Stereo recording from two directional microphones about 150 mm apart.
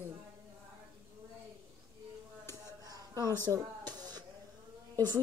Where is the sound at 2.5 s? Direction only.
25° right (ahead or behind).